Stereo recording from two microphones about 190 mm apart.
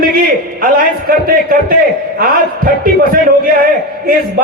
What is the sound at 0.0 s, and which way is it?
A man's voice, 50° right (ahead or behind).